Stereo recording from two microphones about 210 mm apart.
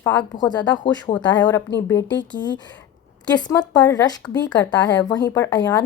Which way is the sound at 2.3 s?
60° left (ahead or behind).